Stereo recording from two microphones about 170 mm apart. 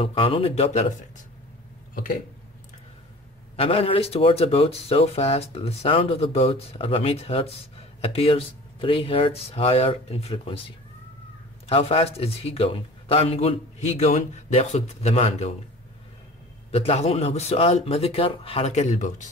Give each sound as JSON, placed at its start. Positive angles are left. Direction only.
{"t": 0.0, "sound": "speech", "side_deg": 30}
{"t": 3.5, "sound": "speech", "side_deg": 35}
{"t": 11.7, "sound": "speech", "side_deg": 35}
{"t": 16.7, "sound": "speech", "side_deg": 35}